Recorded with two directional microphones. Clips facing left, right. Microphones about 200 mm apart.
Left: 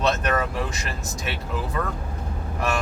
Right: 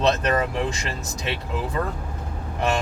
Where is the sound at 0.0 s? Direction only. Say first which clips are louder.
Right 2 dB; 25° right (ahead or behind).